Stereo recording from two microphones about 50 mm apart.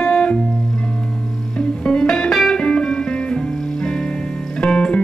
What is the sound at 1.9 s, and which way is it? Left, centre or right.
Music, centre.